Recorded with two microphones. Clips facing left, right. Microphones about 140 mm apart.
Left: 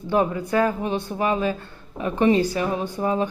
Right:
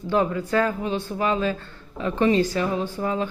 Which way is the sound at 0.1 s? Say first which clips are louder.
Left 1 dB; 15° left (ahead or behind).